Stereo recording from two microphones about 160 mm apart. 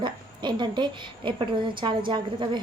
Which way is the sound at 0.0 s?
30° right (ahead or behind).